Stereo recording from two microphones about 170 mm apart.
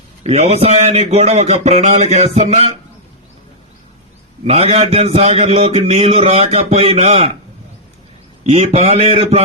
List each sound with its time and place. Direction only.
0.2 s a man's voice: 40° right (ahead or behind)
4.4 s a man's voice: 35° right (ahead or behind)
8.4 s a man's voice: 40° right (ahead or behind)